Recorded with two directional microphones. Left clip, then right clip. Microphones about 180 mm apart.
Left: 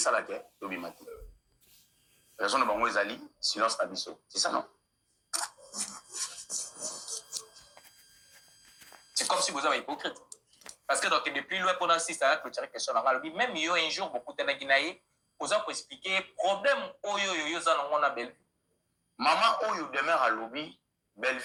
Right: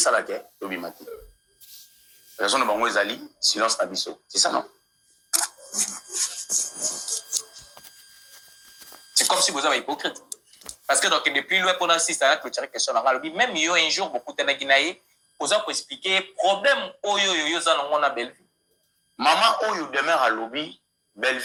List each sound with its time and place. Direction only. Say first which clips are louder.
0.0 s speech: right 7 dB; 25° right (ahead or behind)
2.3 s speech: right 6 dB; 25° right (ahead or behind)
5.3 s music: right 9 dB; 25° right (ahead or behind)
9.0 s speech: right 8 dB; 25° right (ahead or behind)